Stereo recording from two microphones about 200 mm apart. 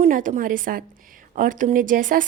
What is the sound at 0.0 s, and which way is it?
A woman's voice, 40° right (ahead or behind).